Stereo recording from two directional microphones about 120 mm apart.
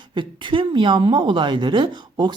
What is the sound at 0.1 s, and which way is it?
A woman's voice, 40° right (ahead or behind).